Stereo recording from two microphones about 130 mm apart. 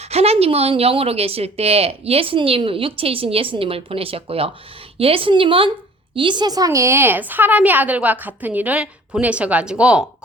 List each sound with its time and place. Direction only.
0.0 s a woman's voice: 55° right (ahead or behind); by 10.1 s 10° right (ahead or behind)